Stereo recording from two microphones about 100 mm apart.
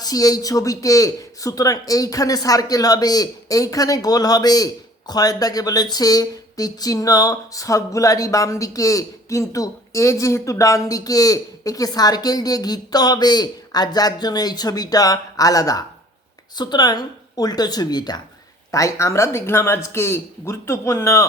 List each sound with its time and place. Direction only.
0.0 s a man's voice: 40° left (ahead or behind)
18.7 s speech: 30° left (ahead or behind)